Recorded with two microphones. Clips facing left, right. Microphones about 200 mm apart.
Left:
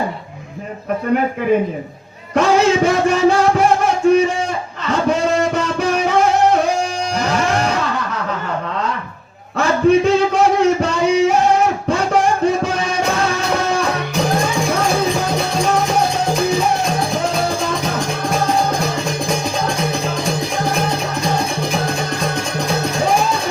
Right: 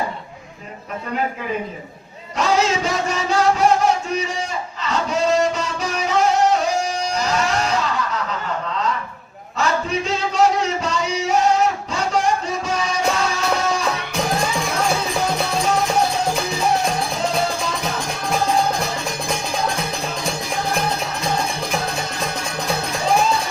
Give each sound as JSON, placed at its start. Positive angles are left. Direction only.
{"t": 2.3, "sound": "music", "side_deg": 55}
{"t": 9.6, "sound": "a sound", "side_deg": 55}
{"t": 11.9, "sound": "music", "side_deg": 55}